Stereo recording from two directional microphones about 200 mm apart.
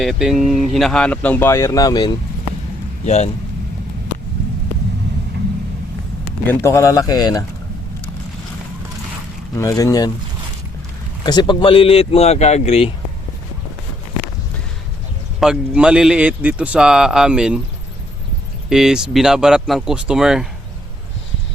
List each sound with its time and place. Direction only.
0.0 s speech: centre (ahead or behind); by 2.1 s 20° left (ahead or behind)
6.5 s speech: 15° left (ahead or behind)
9.6 s speech: 15° left (ahead or behind)
11.2 s speech: 20° left (ahead or behind)
15.4 s speech: 5° right (ahead or behind)
18.7 s speech: 5° right (ahead or behind)